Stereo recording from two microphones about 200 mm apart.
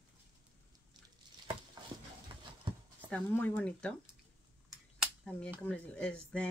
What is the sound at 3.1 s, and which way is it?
Speech, 10° left (ahead or behind).